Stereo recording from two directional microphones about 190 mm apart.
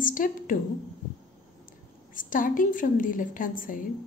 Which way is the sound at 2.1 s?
45° left (ahead or behind).